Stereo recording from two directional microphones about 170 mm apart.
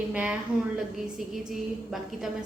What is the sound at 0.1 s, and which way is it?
Speech, 10° right (ahead or behind).